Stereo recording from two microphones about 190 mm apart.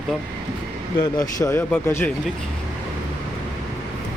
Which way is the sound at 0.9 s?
20° left (ahead or behind).